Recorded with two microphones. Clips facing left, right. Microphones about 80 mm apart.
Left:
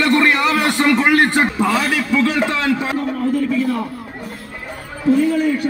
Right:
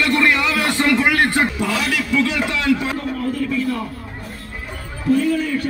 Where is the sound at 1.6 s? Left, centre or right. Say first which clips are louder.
Left 4 dB; left.